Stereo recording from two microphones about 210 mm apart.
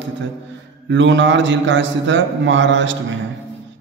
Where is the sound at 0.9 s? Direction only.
60° right (ahead or behind).